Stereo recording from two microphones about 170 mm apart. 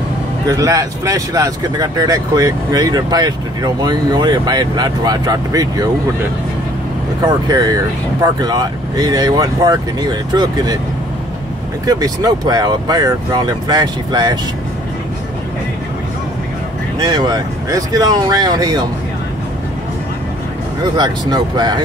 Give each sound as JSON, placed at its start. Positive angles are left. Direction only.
{"t": 0.5, "sound": "speech", "side_deg": -20}
{"t": 7.2, "sound": "speech", "side_deg": -25}
{"t": 11.8, "sound": "speech", "side_deg": -20}
{"t": 17.0, "sound": "speech", "side_deg": -25}
{"t": 20.8, "sound": "speech", "side_deg": -25}